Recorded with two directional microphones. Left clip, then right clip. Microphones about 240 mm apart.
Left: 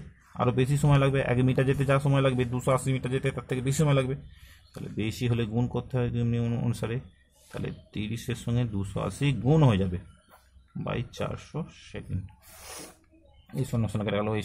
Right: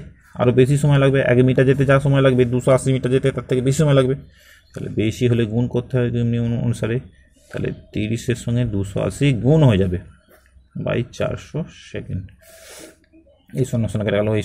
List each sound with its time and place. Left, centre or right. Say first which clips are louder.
0.4 s speech: right 11 dB; centre
12.6 s sneeze: right 3 dB; centre
13.6 s speech: right 10 dB; centre